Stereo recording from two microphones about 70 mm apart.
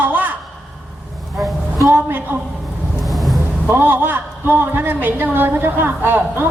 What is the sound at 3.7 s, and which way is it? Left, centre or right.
A woman's voice, right.